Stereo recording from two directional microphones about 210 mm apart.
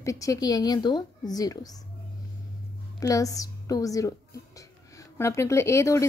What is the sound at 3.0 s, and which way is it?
A woman's voice, 15° left (ahead or behind).